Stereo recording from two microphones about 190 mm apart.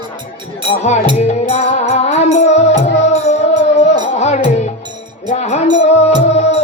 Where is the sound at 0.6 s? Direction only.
35° left (ahead or behind).